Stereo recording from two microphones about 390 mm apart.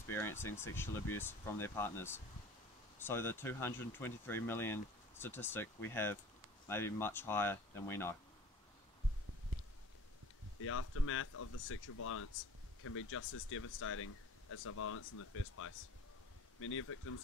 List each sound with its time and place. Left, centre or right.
0.1 s speech: centre
10.6 s speech: left